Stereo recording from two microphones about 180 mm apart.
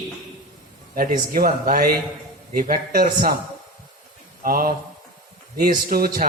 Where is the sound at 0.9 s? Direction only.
50° right (ahead or behind).